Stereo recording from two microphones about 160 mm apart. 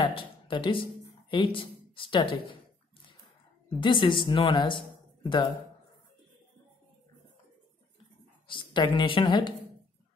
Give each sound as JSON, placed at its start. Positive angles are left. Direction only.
{"t": 0.0, "sound": "speech", "side_deg": 30}
{"t": 3.6, "sound": "speech", "side_deg": 30}
{"t": 8.5, "sound": "a woman's voice", "side_deg": 30}